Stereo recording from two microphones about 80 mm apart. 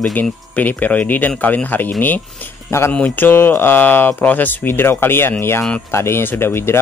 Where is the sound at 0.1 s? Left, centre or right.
Left.